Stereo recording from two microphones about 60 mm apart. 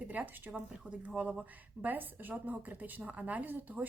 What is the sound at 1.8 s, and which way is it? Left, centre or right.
A woman's voice, right.